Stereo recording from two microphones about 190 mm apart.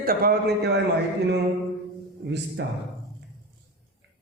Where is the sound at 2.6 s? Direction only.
65° right (ahead or behind).